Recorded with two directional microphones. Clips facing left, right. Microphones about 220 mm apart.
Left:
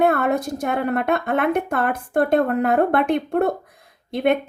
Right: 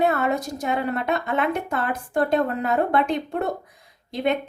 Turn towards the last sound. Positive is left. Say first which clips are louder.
# left 4 dB
turn(degrees=55)  # may be behind; listen again after turning